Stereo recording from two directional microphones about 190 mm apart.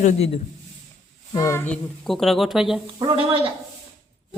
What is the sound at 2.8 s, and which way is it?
Speech, 25° right (ahead or behind).